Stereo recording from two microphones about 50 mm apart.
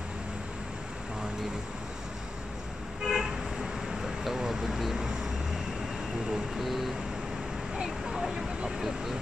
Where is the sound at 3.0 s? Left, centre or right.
Centre.